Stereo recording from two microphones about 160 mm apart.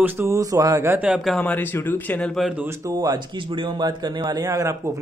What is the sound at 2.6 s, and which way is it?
A man's voice, 20° right (ahead or behind).